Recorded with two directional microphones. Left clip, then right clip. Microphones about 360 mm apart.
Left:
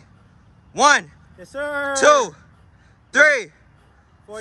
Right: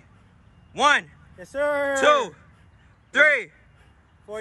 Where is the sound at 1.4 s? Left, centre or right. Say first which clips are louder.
Right 2 dB; right.